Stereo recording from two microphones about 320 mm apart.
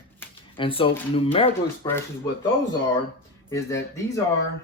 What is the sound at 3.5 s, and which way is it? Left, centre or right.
Speech, centre.